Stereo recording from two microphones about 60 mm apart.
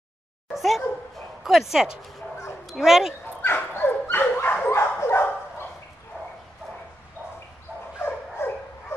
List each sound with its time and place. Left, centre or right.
0.6 s speech: centre
3.4 s dog: left
4.6 s dog: left
8.0 s dog: left